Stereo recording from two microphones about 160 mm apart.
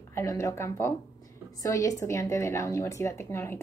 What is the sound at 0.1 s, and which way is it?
A woman's voice, 20° left (ahead or behind).